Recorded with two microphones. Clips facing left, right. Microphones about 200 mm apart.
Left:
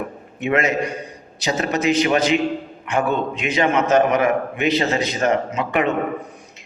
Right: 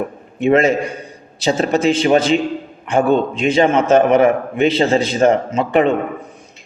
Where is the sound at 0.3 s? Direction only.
30° right (ahead or behind).